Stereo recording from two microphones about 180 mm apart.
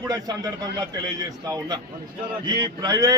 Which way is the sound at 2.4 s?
25° right (ahead or behind).